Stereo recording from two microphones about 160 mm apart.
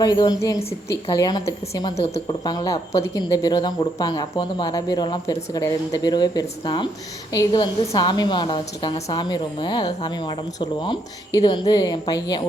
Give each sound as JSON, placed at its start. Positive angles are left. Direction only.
{"t": 0.0, "sound": "speech", "side_deg": 25}
{"t": 2.0, "sound": "a woman's voice", "side_deg": 40}
{"t": 2.4, "sound": "speech", "side_deg": 25}